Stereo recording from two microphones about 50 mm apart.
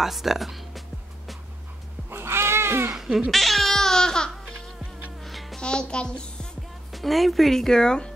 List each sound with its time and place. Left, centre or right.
0.0 s speech: centre
2.0 s cat: right
3.3 s music: centre
5.2 s babbling: centre
5.6 s a child's voice: centre
6.9 s speech: centre